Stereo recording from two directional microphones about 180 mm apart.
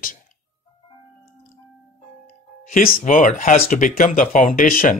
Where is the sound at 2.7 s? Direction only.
50° left (ahead or behind).